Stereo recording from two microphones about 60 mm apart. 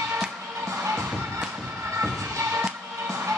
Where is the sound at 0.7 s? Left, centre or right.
Right.